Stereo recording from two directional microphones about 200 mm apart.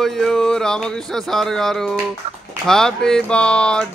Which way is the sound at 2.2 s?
30° right (ahead or behind).